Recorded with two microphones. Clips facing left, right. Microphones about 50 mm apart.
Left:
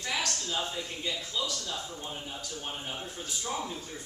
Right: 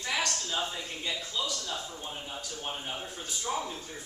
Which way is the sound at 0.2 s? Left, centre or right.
Centre.